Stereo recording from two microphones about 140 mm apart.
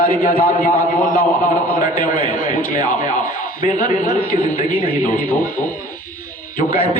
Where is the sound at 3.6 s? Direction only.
70° left (ahead or behind).